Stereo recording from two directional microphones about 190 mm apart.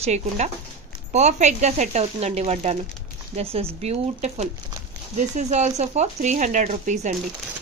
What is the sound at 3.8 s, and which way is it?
Speech, 35° right (ahead or behind).